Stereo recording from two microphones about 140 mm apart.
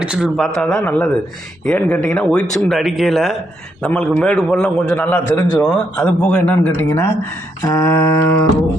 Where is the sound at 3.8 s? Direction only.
10° left (ahead or behind).